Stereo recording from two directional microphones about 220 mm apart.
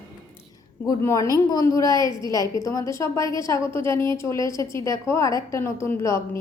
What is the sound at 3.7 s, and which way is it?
A woman's voice, 10° left (ahead or behind).